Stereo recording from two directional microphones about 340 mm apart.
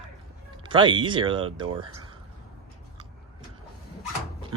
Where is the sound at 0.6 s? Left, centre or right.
Centre.